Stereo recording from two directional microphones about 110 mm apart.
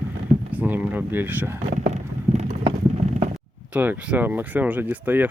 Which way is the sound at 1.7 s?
90° right.